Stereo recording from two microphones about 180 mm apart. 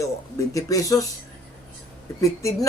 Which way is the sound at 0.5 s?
20° left (ahead or behind).